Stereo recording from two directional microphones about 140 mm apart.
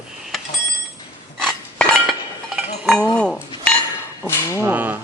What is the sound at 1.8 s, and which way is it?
Chink, 5° left (ahead or behind).